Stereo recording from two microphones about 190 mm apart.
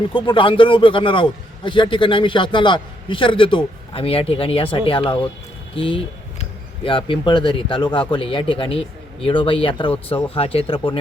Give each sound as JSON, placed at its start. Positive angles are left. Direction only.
{"t": 0.1, "sound": "a man's voice", "side_deg": 25}